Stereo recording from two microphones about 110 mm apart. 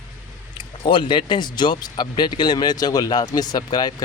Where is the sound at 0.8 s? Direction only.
45° left (ahead or behind).